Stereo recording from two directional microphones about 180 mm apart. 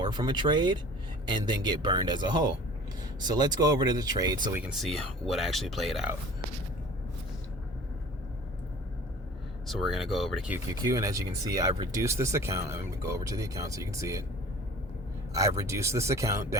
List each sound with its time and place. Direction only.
0.0 s speech: 25° right (ahead or behind)
4.5 s speech: 5° right (ahead or behind)
9.6 s speech: centre (ahead or behind)
10.8 s speech: 15° right (ahead or behind)
15.3 s speech: 15° right (ahead or behind)